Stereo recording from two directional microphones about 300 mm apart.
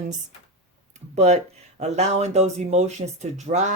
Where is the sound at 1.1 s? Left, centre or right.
Right.